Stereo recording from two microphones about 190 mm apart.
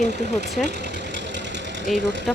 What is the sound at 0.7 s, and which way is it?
Engine, 60° right (ahead or behind).